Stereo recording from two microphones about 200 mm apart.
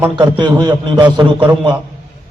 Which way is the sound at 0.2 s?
25° right (ahead or behind).